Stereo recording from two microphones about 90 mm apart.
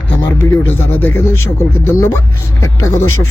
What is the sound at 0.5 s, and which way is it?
Speech, 25° left (ahead or behind).